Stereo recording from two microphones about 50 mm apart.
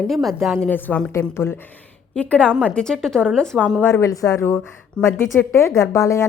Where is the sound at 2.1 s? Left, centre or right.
Left.